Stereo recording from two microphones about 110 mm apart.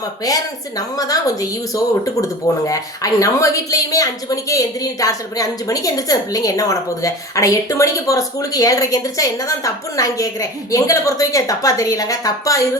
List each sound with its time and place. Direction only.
0.8 s a woman's voice: 35° left (ahead or behind)